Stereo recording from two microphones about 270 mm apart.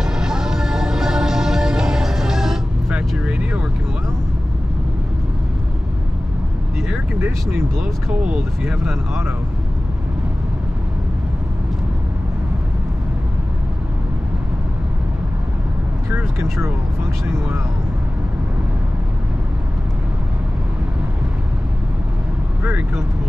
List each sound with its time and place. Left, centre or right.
0.0 s music: centre
6.9 s speech: centre
16.1 s vehicle: centre